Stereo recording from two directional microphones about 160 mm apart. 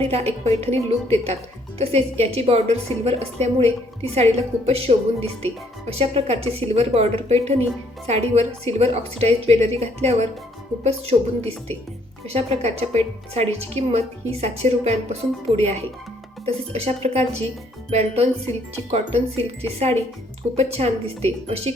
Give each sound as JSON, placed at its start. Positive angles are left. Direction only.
{"t": 0.0, "sound": "a woman's voice", "side_deg": -40}